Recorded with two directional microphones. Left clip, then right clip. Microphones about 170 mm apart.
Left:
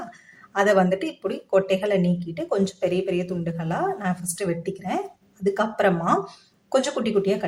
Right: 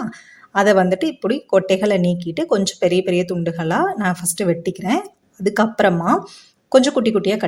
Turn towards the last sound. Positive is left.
turn(degrees=-45)  # may be behind; listen again after turning